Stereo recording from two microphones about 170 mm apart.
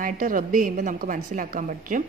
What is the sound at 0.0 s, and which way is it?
A woman's voice, 55° right (ahead or behind).